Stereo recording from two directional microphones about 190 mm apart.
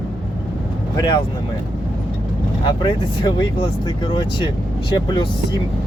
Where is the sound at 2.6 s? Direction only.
25° left (ahead or behind).